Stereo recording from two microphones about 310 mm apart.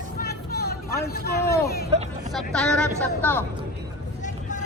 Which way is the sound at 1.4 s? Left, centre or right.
Centre.